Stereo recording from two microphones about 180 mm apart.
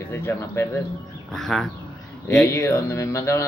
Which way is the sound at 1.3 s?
Centre (ahead or behind).